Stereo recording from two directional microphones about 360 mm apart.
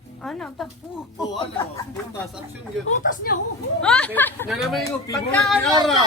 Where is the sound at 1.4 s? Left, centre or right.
Centre.